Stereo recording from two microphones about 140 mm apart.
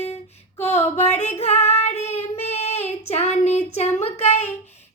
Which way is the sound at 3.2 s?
55° left (ahead or behind).